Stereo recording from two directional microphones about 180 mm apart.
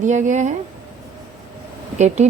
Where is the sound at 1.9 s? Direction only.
40° right (ahead or behind).